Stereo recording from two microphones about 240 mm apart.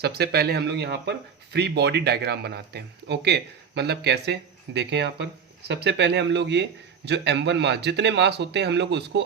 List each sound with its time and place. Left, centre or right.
0.0 s speech: right